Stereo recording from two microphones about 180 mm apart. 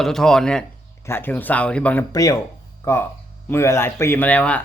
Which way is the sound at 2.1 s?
20° left (ahead or behind).